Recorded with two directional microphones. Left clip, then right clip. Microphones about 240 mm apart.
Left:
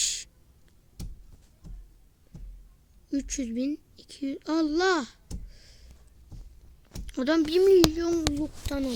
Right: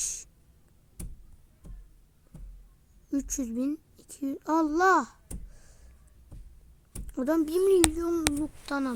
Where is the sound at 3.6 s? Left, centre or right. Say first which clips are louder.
Left 1 dB; centre.